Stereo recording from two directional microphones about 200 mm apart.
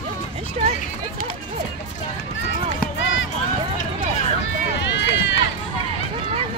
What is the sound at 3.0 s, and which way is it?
Run, 70° left (ahead or behind).